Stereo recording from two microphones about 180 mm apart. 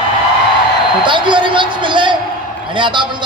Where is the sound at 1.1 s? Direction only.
25° right (ahead or behind).